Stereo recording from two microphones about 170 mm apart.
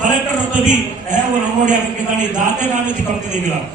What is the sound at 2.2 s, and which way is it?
Speech, 45° right (ahead or behind).